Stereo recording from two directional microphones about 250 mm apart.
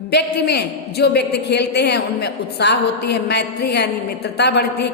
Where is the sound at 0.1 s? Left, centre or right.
Left.